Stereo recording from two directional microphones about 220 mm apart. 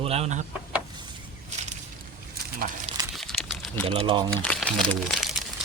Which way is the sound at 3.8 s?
25° right (ahead or behind).